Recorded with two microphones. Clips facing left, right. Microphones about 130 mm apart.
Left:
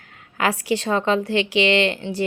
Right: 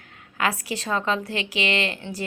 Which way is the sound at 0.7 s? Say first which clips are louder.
Left 5 dB; 30° left (ahead or behind).